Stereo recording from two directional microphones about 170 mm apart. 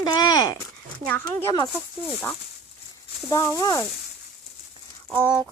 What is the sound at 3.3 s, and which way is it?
Speech, 20° left (ahead or behind).